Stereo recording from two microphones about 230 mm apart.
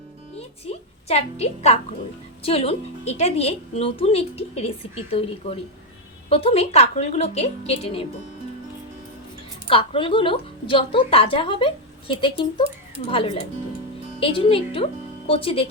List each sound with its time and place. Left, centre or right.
0.3 s a child's voice: left
6.2 s a woman's voice: left
9.6 s a woman's voice: left